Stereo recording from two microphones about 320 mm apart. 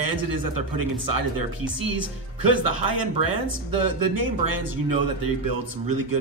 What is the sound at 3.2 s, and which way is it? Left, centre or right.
A man's voice, right.